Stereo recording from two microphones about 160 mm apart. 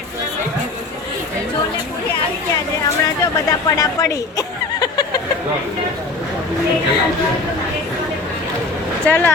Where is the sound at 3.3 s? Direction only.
20° left (ahead or behind).